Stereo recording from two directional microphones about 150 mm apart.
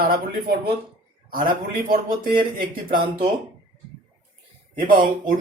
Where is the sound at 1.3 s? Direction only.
70° right (ahead or behind).